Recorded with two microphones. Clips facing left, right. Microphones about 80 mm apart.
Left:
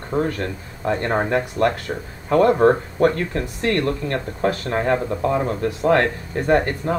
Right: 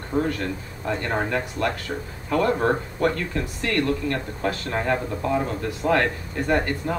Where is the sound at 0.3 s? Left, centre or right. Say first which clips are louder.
Left 1 dB; left.